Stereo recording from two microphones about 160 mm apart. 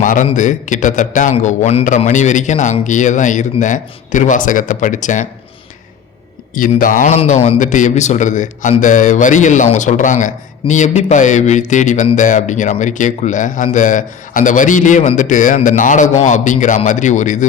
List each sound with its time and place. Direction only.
0.0 s a man's voice: 55° left (ahead or behind)
6.5 s speech: 55° left (ahead or behind)
7.2 s a man's voice: 40° left (ahead or behind)